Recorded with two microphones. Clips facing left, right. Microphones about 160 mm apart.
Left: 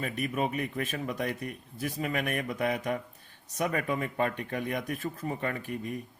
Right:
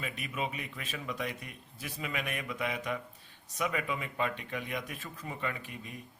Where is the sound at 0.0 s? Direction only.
45° left (ahead or behind).